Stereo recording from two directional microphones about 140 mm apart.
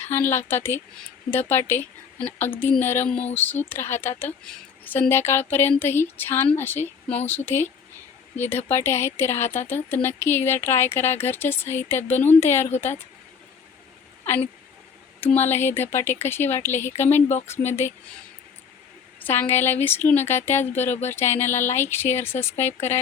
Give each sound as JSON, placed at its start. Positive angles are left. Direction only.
{"t": 0.0, "sound": "speech", "side_deg": 15}
{"t": 15.2, "sound": "speech", "side_deg": 15}
{"t": 19.2, "sound": "speech", "side_deg": 15}